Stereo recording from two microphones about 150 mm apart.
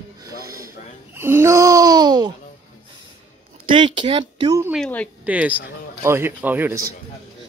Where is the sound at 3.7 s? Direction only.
35° right (ahead or behind).